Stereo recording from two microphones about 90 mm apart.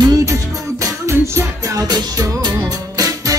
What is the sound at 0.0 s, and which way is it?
Music, 40° right (ahead or behind).